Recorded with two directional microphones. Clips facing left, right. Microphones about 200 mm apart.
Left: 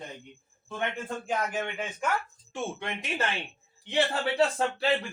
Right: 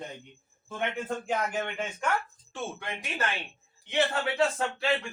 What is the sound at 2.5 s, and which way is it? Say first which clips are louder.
Speech: left 3 dB; 20° left (ahead or behind).